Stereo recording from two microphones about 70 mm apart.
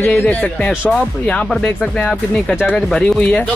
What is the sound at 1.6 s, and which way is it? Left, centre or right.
Music, centre.